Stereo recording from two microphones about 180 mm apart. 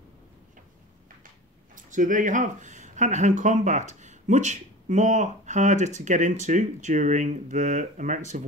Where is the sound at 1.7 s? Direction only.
45° right (ahead or behind).